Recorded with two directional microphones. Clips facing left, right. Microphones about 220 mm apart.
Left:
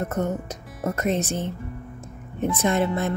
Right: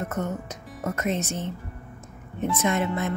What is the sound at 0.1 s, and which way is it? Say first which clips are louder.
Speech: left 4 dB; 35° left (ahead or behind).